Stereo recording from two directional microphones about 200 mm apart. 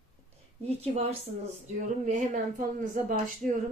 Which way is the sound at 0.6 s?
30° right (ahead or behind).